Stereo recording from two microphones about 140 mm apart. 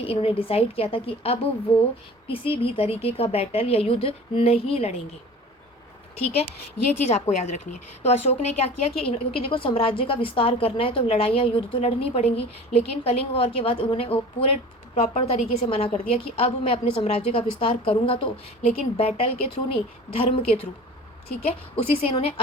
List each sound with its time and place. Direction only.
0.0 s a woman's voice: 40° left (ahead or behind)
7.1 s a woman's voice: 60° left (ahead or behind)